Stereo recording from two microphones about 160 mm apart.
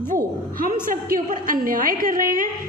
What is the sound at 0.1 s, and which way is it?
A woman's voice, 55° right (ahead or behind).